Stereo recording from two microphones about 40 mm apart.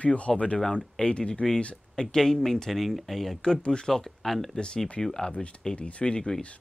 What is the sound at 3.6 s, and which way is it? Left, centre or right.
Speech, left.